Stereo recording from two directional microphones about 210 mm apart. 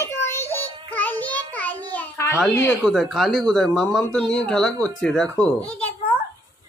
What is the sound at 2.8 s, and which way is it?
Speech, centre (ahead or behind).